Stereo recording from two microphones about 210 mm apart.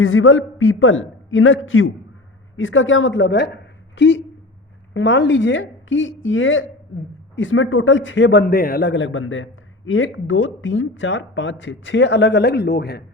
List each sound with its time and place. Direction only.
0.0 s a man's voice: 70° left (ahead or behind); by 13.0 s 50° left (ahead or behind)